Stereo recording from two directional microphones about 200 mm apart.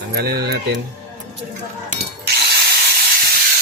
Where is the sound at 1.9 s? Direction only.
50° right (ahead or behind).